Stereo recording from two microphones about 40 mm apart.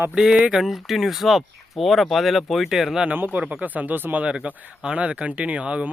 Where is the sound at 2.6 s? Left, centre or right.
Centre.